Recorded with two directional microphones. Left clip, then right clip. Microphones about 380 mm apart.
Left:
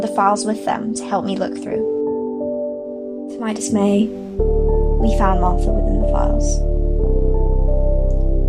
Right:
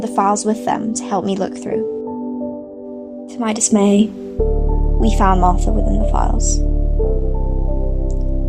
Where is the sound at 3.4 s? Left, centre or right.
Right.